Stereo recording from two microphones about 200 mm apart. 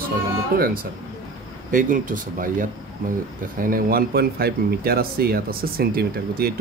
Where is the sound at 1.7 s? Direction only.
40° right (ahead or behind).